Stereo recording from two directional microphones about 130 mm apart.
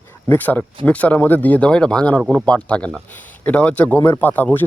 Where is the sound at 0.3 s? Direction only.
15° left (ahead or behind).